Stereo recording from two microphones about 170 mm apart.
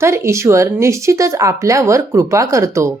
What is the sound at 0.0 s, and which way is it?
Speech, 15° right (ahead or behind).